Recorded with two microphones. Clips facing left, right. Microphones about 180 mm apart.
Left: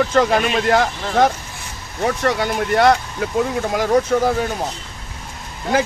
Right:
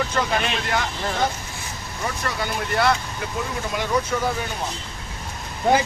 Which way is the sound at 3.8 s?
45° left (ahead or behind).